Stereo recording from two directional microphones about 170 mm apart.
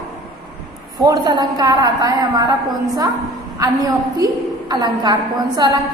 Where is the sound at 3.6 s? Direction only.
20° right (ahead or behind).